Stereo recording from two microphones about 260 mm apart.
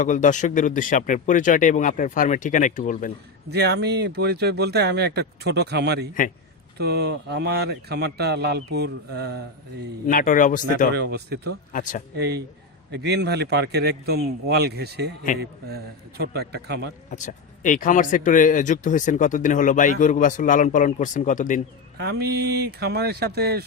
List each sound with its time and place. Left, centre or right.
0.0 s speech: left
3.5 s a man's voice: right
10.1 s speech: left
10.9 s a man's voice: right
11.7 s speech: left
12.1 s a man's voice: right
17.1 s speech: left
22.2 s a man's voice: right